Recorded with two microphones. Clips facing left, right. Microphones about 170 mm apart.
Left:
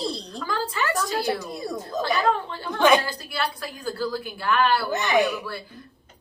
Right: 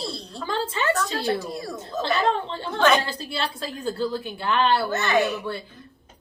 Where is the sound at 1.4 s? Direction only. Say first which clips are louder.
Left 1 dB; 20° left (ahead or behind).